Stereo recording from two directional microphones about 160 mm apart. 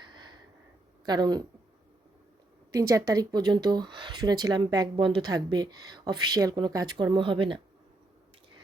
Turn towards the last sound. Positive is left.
turn(degrees=-30)  # may be behind; listen again after turning